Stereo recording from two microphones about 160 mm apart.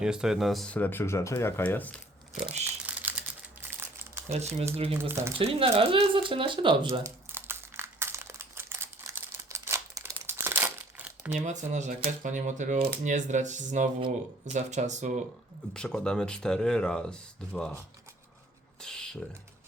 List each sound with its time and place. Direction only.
0.0 s speech: 5° right (ahead or behind)
2.8 s typewriter: 10° right (ahead or behind)
4.3 s speech: 45° right (ahead or behind)
4.9 s speech: 15° right (ahead or behind)
5.4 s speech: 35° right (ahead or behind)
7.3 s crumpling: 15° right (ahead or behind)
11.3 s speech: 50° right (ahead or behind)
15.7 s speech: 5° left (ahead or behind)
18.8 s a sound: 5° left (ahead or behind)